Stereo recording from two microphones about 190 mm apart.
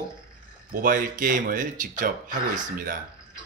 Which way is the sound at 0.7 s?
45° right (ahead or behind).